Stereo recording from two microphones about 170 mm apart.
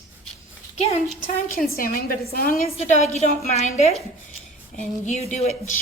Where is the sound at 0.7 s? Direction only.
40° left (ahead or behind).